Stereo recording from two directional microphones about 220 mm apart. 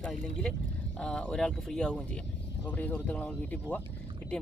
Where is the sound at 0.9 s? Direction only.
5° left (ahead or behind).